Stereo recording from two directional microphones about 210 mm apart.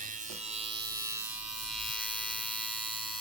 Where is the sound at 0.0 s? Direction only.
35° right (ahead or behind).